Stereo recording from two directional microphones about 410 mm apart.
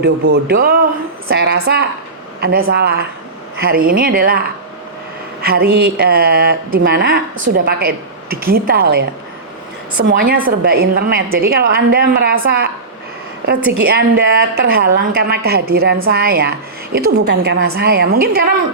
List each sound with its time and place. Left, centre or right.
0.0 s a woman's voice: right
5.4 s a sound: right
5.7 s a woman's voice: right
13.8 s a woman's voice: right